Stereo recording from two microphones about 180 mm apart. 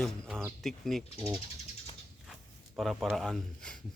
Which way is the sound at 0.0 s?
Centre (ahead or behind).